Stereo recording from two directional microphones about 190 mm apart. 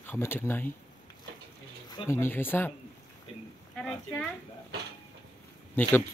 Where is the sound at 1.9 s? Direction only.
15° left (ahead or behind).